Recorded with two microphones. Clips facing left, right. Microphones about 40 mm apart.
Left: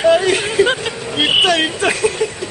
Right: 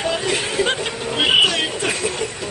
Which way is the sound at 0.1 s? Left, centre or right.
Left.